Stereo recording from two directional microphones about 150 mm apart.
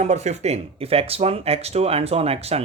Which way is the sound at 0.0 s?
50° right (ahead or behind).